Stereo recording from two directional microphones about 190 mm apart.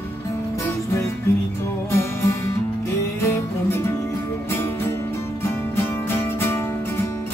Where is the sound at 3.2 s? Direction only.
15° left (ahead or behind).